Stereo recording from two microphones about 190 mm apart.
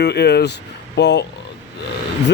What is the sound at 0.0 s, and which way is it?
A man's voice, 60° left (ahead or behind).